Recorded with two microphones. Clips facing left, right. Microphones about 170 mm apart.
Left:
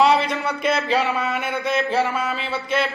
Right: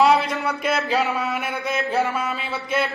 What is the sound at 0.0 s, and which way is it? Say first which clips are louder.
Music: even; centre (ahead or behind).